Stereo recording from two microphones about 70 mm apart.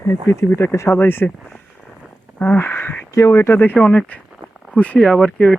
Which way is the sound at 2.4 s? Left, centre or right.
Left.